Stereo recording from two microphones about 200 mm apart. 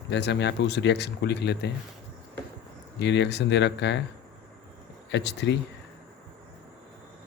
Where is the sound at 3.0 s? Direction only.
60° left (ahead or behind).